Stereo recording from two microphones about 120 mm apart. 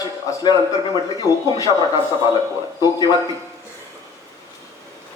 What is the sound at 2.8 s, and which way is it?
Speech, 30° left (ahead or behind).